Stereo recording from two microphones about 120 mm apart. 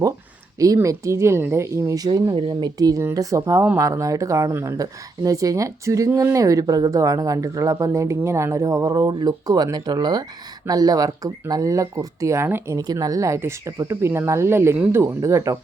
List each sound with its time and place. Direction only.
0.6 s speech: 25° right (ahead or behind)